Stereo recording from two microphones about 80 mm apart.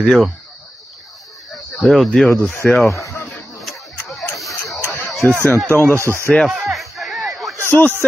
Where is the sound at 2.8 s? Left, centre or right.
Left.